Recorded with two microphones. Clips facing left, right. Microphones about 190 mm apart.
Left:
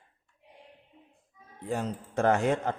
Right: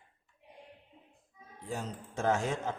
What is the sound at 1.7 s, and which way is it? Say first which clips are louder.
Speech: left 7 dB; 60° left (ahead or behind).